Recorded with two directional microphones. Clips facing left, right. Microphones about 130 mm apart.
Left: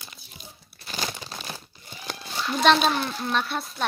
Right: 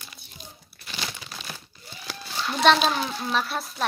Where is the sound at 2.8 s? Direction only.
Centre (ahead or behind).